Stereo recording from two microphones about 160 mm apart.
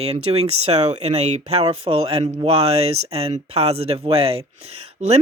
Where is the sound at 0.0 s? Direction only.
40° right (ahead or behind).